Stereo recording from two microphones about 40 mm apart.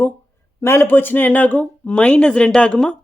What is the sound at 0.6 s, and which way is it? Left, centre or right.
Speech, left.